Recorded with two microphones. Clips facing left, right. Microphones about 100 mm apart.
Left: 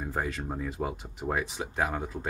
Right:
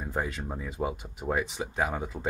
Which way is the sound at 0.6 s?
5° right (ahead or behind).